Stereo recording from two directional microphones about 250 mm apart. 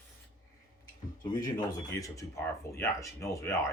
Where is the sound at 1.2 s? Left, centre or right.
Centre.